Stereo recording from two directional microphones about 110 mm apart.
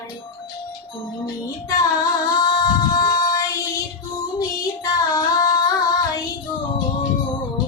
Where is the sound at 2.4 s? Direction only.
40° left (ahead or behind).